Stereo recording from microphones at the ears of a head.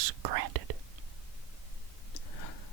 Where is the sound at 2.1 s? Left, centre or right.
Left.